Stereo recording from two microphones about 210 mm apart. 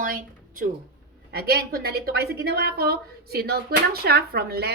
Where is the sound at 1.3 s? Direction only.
50° right (ahead or behind).